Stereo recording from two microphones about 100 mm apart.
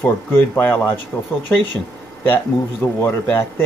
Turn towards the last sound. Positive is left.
turn(degrees=20)  # may be behind; listen again after turning